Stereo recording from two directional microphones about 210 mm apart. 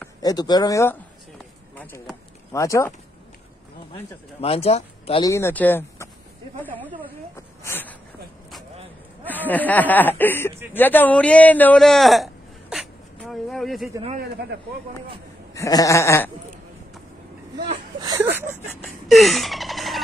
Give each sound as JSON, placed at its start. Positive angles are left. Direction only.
{"t": 0.2, "sound": "speech", "side_deg": 20}
{"t": 4.4, "sound": "speech", "side_deg": 30}
{"t": 5.2, "sound": "speech", "side_deg": 15}
{"t": 7.3, "sound": "speech", "side_deg": 10}
{"t": 9.2, "sound": "a man's voice", "side_deg": 10}
{"t": 14.5, "sound": "speech", "side_deg": -55}
{"t": 15.5, "sound": "speech", "side_deg": 15}
{"t": 18.0, "sound": "speech", "side_deg": -15}
{"t": 19.0, "sound": "a sound", "side_deg": 0}